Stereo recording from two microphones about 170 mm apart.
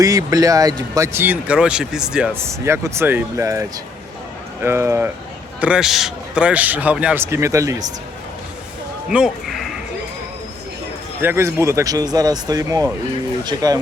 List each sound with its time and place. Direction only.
0.0 s speech: 20° right (ahead or behind)
9.0 s a sound: 5° right (ahead or behind)
11.2 s speech: 15° right (ahead or behind)